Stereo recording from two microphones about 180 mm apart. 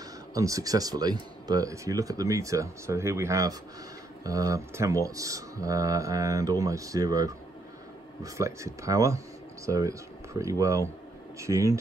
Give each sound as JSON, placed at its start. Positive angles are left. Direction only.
{"t": 0.3, "sound": "speech", "side_deg": -20}